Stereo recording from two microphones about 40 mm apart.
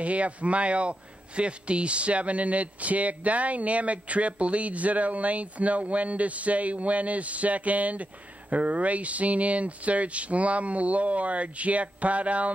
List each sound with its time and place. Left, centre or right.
0.0 s speech: right